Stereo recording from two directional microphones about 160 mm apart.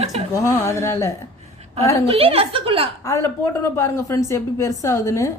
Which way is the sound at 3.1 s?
20° left (ahead or behind).